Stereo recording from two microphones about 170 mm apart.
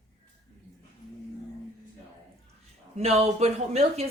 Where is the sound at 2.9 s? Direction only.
40° right (ahead or behind).